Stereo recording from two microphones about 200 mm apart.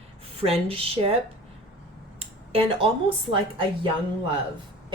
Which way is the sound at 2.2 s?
30° right (ahead or behind).